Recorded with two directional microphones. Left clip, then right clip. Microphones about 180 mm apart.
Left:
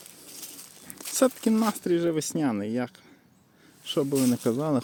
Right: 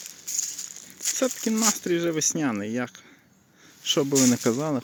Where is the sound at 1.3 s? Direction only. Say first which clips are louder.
Left 2 dB; 20° left (ahead or behind).